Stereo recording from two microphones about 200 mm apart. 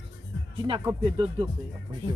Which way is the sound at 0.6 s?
25° right (ahead or behind).